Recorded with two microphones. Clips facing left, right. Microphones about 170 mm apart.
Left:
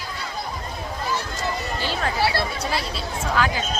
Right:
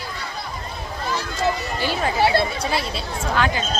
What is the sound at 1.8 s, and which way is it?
Speech, 15° right (ahead or behind).